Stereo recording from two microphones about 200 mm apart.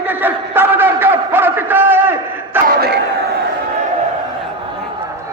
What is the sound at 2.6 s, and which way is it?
Crowd, 50° right (ahead or behind).